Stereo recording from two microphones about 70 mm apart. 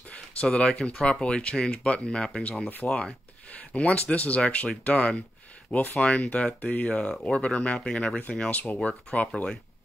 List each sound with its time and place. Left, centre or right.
0.1 s speech: centre